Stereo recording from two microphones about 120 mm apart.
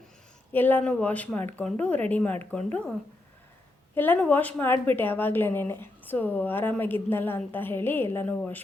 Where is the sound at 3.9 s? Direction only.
15° left (ahead or behind).